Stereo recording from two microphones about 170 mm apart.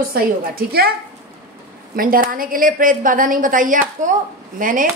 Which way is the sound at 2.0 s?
55° right (ahead or behind).